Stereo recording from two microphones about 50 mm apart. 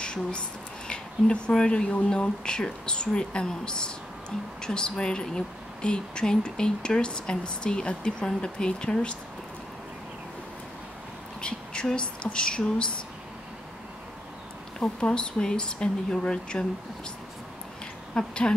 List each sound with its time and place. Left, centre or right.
0.0 s a sound: centre
0.8 s speech: centre
11.4 s speech: centre
14.8 s speech: left
18.1 s speech: centre